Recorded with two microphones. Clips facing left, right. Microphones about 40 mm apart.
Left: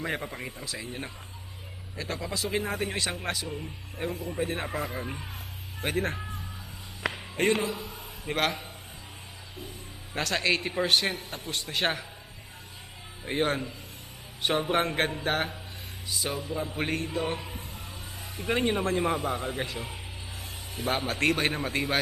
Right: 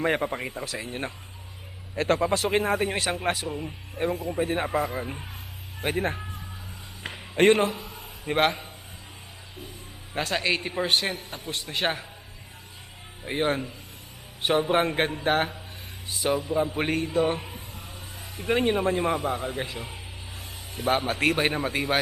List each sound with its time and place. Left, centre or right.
0.0 s speech: right
3.4 s a man's voice: centre
3.9 s speech: centre
4.9 s a man's voice: centre
5.8 s speech: centre
7.3 s speech: right
7.8 s a sound: centre
8.3 s speech: centre
10.2 s a man's voice: centre
13.2 s speech: centre
16.2 s speech: centre
16.7 s a man's voice: right
18.2 s a man's voice: centre
21.2 s speech: centre